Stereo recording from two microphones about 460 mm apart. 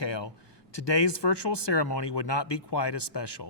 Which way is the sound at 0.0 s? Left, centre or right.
Left.